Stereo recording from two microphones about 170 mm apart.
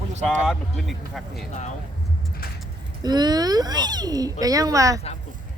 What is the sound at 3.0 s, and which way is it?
A child's voice, 25° right (ahead or behind).